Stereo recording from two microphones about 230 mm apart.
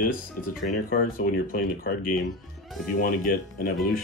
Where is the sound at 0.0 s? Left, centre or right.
Left.